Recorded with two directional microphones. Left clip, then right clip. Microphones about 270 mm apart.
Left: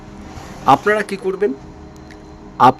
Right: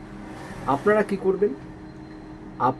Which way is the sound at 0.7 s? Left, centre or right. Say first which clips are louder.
Left 7 dB; left.